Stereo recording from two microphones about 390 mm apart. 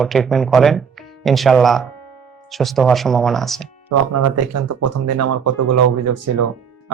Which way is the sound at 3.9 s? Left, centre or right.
Right.